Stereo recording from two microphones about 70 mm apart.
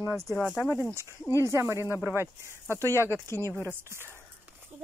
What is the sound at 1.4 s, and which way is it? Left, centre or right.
Speech, right.